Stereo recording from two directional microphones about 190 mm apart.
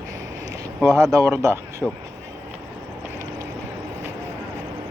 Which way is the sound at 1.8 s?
5° right (ahead or behind).